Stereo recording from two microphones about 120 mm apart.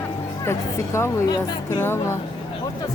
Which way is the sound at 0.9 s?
25° left (ahead or behind).